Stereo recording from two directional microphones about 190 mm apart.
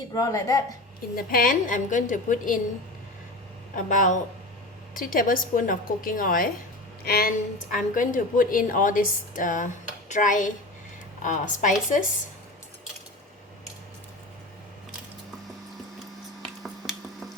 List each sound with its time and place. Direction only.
0.1 s speech: 20° left (ahead or behind)
1.1 s a woman's voice: 50° left (ahead or behind)
3.8 s a woman's voice: 45° left (ahead or behind)
16.4 s finger snapping: centre (ahead or behind)